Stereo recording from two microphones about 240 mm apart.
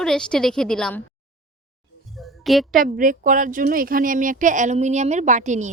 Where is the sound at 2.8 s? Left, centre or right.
Right.